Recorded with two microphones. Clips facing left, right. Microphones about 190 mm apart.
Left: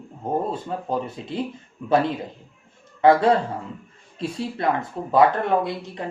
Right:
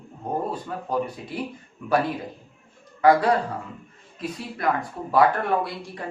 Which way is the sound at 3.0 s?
25° left (ahead or behind).